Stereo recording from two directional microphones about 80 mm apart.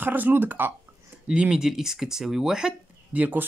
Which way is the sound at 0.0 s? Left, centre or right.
Right.